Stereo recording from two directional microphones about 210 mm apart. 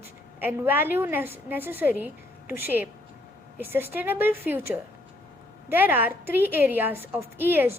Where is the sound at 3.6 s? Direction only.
10° right (ahead or behind).